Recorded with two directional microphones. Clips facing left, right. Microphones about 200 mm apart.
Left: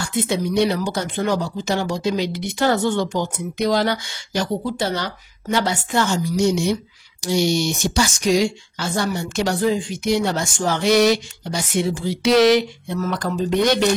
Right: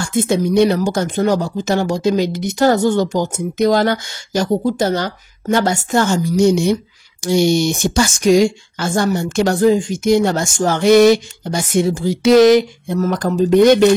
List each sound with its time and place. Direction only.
0.0 s speech: 45° right (ahead or behind)